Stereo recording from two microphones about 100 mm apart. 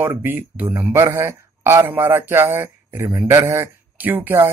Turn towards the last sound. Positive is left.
turn(degrees=-20)  # may be behind; listen again after turning